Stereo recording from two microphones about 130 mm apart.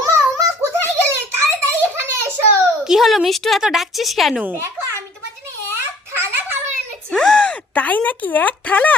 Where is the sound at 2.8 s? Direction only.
Centre (ahead or behind).